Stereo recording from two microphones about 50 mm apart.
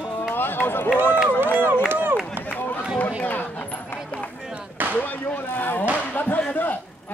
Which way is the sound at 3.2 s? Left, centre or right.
Left.